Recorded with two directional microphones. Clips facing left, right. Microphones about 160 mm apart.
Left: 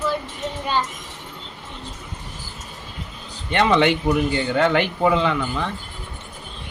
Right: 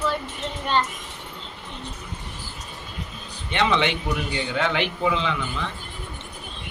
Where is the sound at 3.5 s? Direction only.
45° left (ahead or behind).